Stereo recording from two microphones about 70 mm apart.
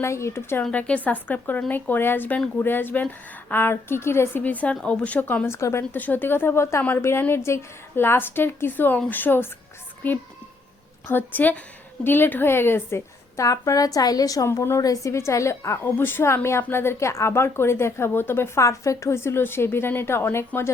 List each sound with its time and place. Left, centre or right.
0.0 s speech: left
0.6 s speech: centre; by 4.4 s left
4.4 s speech: left
5.5 s a woman's voice: left
5.9 s speech: left
13.4 s speech: left
14.4 s speech: left
14.8 s a woman's voice: left